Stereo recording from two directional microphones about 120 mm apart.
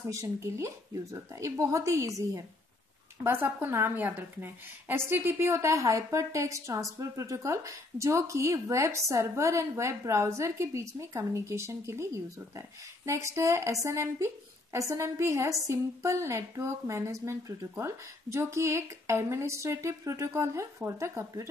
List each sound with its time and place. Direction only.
0.1 s a woman's voice: 25° right (ahead or behind)